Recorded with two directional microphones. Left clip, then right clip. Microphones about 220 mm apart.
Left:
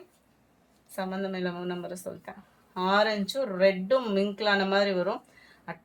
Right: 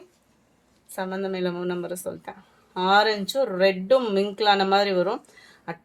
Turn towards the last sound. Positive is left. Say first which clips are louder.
# right 5 dB
turn(degrees=-55)  # may be behind; listen again after turning